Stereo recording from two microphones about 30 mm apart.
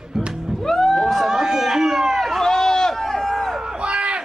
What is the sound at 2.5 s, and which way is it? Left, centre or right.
Run, left.